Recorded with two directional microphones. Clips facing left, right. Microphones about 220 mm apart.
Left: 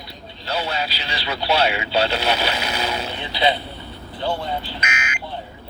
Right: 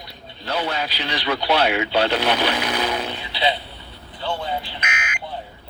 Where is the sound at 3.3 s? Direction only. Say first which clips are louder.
Left 3 dB; 45° left (ahead or behind).